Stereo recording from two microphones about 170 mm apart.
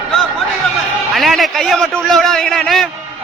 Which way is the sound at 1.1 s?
Centre (ahead or behind).